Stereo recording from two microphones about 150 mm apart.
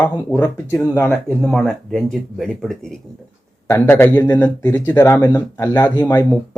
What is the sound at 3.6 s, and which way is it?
Speech, 15° left (ahead or behind).